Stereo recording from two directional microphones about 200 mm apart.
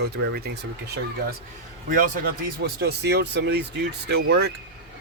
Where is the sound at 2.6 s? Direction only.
55° right (ahead or behind).